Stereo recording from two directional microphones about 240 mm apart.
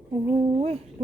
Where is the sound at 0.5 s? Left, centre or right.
Right.